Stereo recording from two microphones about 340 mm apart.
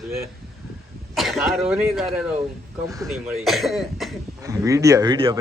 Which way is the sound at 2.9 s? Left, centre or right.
Centre.